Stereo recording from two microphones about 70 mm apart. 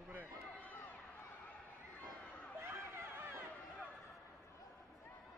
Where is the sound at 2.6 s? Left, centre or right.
Right.